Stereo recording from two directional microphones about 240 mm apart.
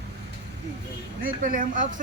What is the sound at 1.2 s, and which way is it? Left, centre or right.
Speech, right.